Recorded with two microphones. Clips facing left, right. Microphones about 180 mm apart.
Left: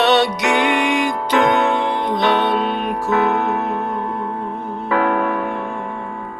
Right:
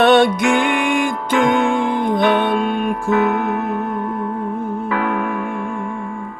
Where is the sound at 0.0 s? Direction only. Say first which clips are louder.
Right 3 dB; 50° right (ahead or behind).